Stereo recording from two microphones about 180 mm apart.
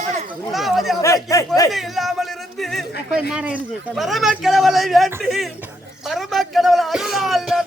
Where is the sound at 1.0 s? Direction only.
15° left (ahead or behind).